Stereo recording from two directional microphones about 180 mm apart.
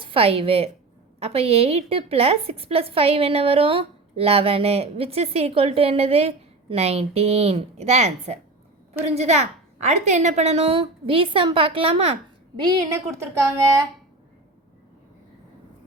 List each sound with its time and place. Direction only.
0.0 s a woman's voice: 30° right (ahead or behind)
12.6 s speech: 15° right (ahead or behind)